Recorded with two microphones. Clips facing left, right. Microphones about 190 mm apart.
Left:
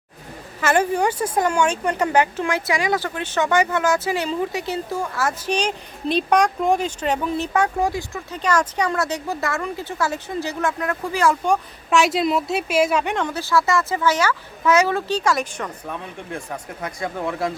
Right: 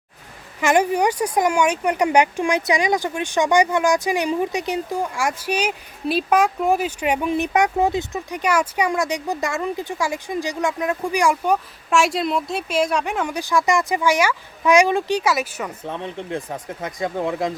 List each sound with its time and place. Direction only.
0.6 s speech: 15° right (ahead or behind); by 13.2 s centre (ahead or behind)
13.2 s speech: 15° right (ahead or behind)
15.8 s speech: 20° right (ahead or behind)